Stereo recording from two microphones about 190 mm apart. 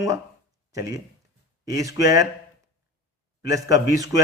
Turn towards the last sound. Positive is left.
turn(degrees=-20)  # may be behind; listen again after turning